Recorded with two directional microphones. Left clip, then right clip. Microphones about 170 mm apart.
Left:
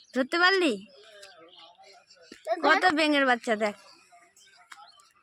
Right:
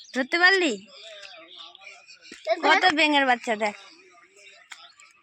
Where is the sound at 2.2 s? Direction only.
50° right (ahead or behind).